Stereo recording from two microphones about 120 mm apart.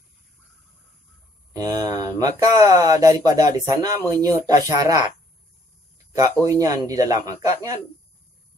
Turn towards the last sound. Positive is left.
turn(degrees=-30)  # may be behind; listen again after turning